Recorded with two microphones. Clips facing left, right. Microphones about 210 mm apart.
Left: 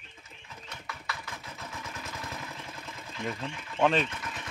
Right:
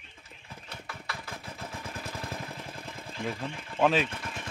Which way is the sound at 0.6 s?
30° right (ahead or behind).